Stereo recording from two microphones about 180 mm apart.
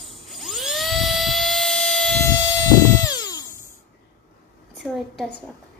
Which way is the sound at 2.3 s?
20° left (ahead or behind).